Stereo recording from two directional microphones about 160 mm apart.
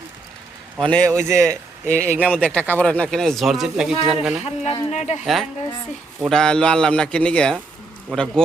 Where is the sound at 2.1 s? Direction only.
10° right (ahead or behind).